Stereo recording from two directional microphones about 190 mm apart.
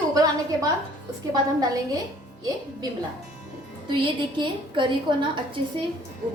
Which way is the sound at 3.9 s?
25° right (ahead or behind).